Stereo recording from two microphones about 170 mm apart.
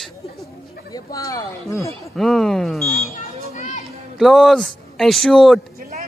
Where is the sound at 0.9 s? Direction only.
20° left (ahead or behind).